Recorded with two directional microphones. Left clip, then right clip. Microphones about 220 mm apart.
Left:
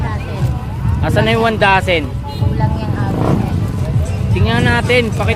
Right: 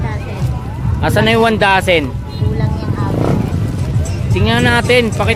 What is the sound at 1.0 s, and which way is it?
Speech, 15° right (ahead or behind).